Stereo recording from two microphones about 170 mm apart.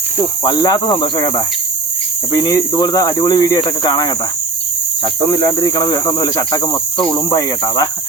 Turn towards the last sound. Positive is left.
turn(degrees=20)  # may be behind; listen again after turning